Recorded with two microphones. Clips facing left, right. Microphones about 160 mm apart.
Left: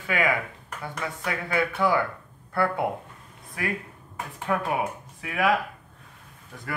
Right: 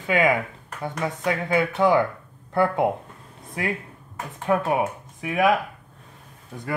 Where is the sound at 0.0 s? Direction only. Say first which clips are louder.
Right 5 dB; 20° right (ahead or behind).